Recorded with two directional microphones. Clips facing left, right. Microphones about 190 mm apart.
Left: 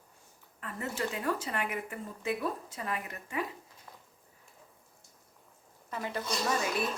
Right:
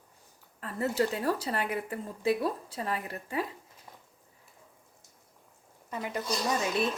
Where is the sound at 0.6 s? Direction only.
35° right (ahead or behind).